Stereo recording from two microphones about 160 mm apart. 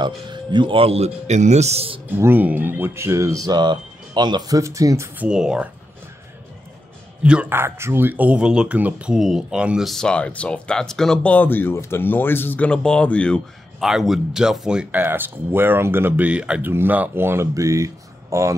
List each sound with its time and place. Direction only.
0.0 s speech: 30° right (ahead or behind)
2.0 s speech: 15° right (ahead or behind)
7.2 s speech: 10° right (ahead or behind)